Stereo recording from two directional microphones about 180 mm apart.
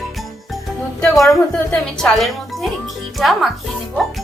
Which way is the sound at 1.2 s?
Centre (ahead or behind).